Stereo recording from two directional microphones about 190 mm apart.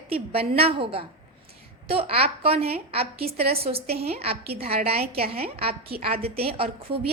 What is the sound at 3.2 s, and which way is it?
Speech, 55° right (ahead or behind).